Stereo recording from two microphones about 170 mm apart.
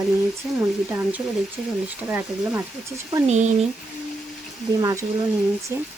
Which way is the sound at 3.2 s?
40° right (ahead or behind).